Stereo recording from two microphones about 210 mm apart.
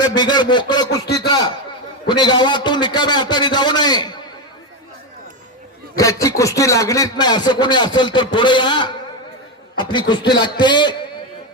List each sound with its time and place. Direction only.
0.0 s a man's voice: 20° left (ahead or behind)
6.0 s speech: 15° left (ahead or behind)